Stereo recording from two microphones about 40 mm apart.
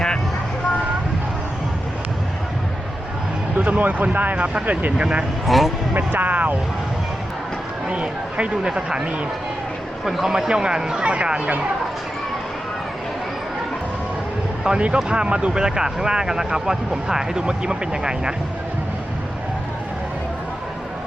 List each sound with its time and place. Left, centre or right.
3.6 s speech: right
4.4 s speech: right
4.6 s speech: right
4.9 s speech: right
5.5 s speech: centre
5.9 s speech: right
7.9 s speech: right
10.1 s speech: centre; by 11.5 s right
14.9 s speech: right
15.6 s speech: centre